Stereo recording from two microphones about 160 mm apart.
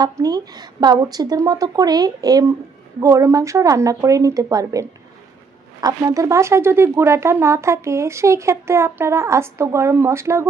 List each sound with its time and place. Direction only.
0.0 s speech: 25° right (ahead or behind)